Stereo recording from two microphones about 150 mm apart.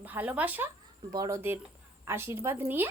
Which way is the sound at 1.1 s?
25° right (ahead or behind).